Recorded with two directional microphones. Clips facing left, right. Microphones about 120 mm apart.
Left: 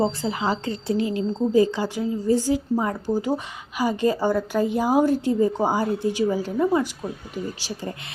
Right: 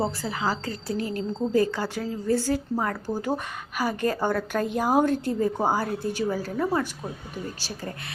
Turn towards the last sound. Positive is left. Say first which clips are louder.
# left 4 dB
turn(degrees=15)  # may be behind; listen again after turning